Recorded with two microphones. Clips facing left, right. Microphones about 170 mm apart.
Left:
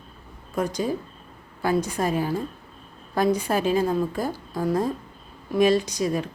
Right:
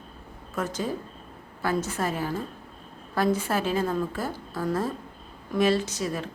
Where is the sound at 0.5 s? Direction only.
15° left (ahead or behind).